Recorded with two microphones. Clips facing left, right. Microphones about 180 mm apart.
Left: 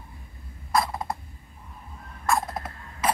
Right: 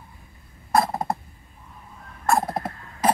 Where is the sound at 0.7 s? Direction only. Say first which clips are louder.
Right 4 dB; 45° right (ahead or behind).